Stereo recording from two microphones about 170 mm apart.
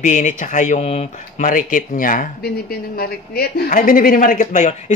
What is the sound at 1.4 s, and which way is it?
Speech, 50° left (ahead or behind).